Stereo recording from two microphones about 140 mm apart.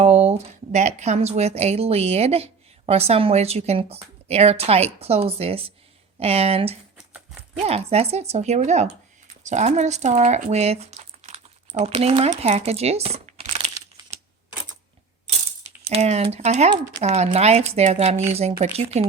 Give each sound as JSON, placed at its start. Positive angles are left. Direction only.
{"t": 0.0, "sound": "a woman's voice", "side_deg": -50}
{"t": 15.3, "sound": "speech", "side_deg": -50}